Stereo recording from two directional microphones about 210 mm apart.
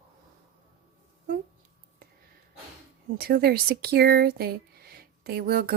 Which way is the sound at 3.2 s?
45° right (ahead or behind).